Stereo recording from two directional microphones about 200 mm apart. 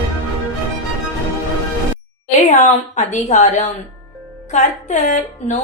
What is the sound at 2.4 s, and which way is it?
A woman's voice, 35° left (ahead or behind).